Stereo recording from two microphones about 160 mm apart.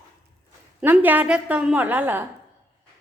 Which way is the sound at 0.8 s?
10° right (ahead or behind).